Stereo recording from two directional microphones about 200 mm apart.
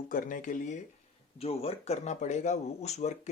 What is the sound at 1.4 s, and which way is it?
Speech, 30° left (ahead or behind).